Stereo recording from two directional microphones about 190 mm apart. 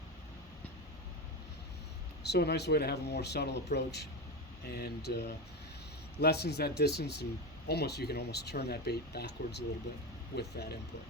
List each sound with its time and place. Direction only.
2.2 s speech: 60° left (ahead or behind)